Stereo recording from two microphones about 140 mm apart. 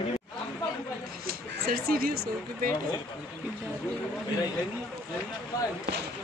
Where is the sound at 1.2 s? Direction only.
90° right.